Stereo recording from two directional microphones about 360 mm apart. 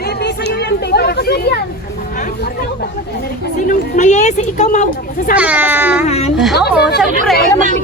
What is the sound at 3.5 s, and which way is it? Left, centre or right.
A woman's voice, centre.